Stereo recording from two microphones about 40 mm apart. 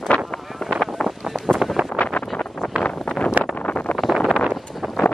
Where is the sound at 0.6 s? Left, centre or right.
Centre.